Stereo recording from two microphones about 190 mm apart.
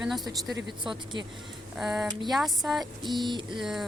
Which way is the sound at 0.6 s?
25° right (ahead or behind).